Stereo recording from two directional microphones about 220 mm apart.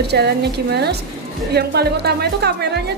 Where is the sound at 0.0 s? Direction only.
50° right (ahead or behind).